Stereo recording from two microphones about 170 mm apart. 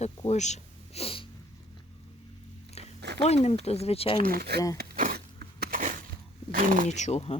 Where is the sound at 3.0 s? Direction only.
85° right.